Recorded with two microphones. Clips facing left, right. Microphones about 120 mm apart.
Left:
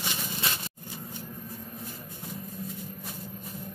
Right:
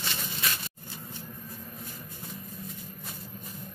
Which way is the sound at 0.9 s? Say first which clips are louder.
Left 4 dB; 15° left (ahead or behind).